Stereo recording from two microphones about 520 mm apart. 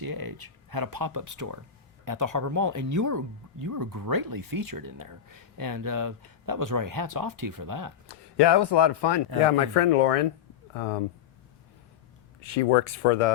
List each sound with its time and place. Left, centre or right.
0.0 s speech: right
8.0 s a man's voice: left
9.5 s speech: left
12.5 s speech: left